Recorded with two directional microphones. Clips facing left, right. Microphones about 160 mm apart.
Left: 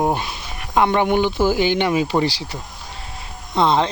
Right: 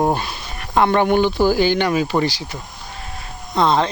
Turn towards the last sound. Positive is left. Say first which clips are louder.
# even
turn(degrees=20)  # may be behind; listen again after turning